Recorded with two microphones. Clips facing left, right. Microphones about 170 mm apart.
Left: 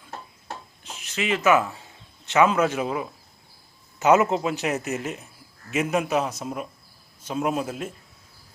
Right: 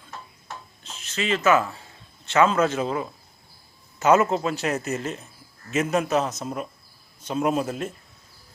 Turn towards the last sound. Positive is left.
turn(degrees=5)  # may be behind; listen again after turning